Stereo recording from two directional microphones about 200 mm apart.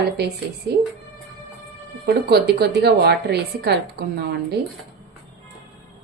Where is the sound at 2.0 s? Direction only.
55° right (ahead or behind).